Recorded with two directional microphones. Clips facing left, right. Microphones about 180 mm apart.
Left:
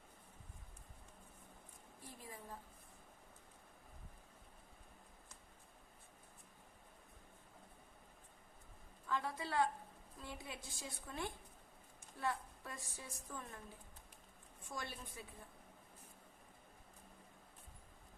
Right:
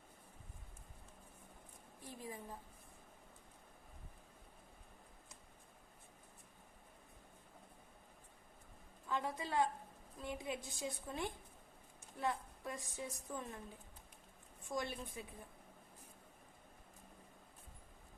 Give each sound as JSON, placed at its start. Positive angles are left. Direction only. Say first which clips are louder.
{"t": 2.0, "sound": "a sound", "louder": "right 4 dB", "side_deg": -15}
{"t": 9.0, "sound": "a woman's voice", "louder": "right 1 dB", "side_deg": -20}
{"t": 14.7, "sound": "a woman's voice", "louder": "right 6 dB", "side_deg": -20}